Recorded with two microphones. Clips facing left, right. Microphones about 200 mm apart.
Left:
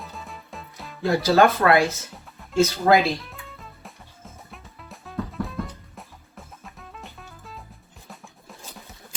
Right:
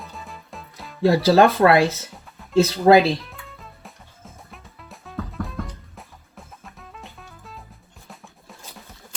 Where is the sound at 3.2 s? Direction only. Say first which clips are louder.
Even; centre (ahead or behind).